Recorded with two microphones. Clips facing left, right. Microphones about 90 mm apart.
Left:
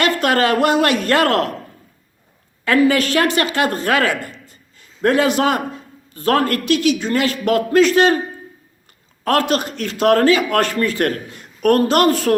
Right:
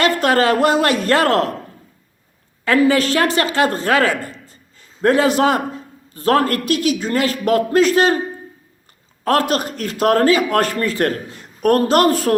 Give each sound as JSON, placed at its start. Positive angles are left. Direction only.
{"t": 0.0, "sound": "speech", "side_deg": -30}
{"t": 2.6, "sound": "a woman's voice", "side_deg": -30}
{"t": 9.5, "sound": "speech", "side_deg": -35}